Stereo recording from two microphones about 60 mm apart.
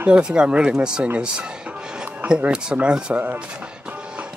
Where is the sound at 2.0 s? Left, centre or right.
Right.